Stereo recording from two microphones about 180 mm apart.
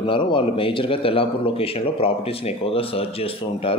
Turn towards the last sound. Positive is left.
turn(degrees=30)  # may be behind; listen again after turning